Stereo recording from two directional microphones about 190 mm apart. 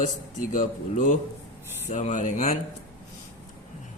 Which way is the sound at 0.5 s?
40° left (ahead or behind).